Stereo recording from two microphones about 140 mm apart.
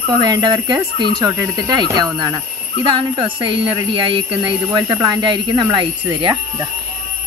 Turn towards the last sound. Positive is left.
turn(degrees=-35)  # may be behind; listen again after turning